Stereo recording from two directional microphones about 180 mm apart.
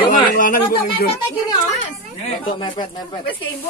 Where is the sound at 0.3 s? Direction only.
50° left (ahead or behind).